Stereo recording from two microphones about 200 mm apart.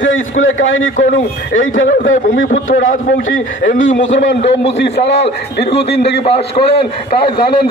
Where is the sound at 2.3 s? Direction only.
60° left (ahead or behind).